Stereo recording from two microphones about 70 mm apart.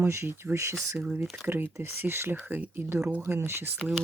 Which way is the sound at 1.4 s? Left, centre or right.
Right.